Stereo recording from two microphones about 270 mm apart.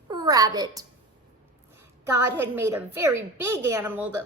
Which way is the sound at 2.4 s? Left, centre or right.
Centre.